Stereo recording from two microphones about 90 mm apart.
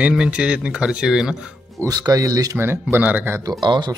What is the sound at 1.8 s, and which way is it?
Speech, 45° right (ahead or behind).